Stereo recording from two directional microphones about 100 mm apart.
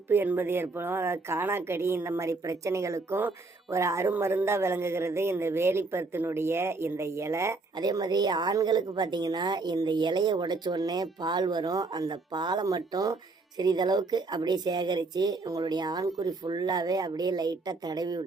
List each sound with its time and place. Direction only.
0.1 s speech: 20° right (ahead or behind)
7.8 s a woman's voice: 40° right (ahead or behind)